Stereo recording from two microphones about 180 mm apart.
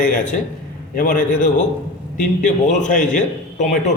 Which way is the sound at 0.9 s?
50° left (ahead or behind).